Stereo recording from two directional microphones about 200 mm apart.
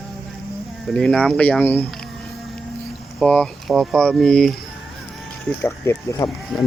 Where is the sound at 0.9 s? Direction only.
5° left (ahead or behind).